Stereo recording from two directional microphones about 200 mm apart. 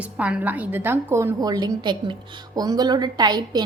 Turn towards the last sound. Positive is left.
turn(degrees=-20)  # may be behind; listen again after turning